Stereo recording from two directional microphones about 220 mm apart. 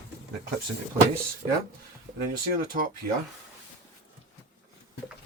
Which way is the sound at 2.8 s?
40° right (ahead or behind).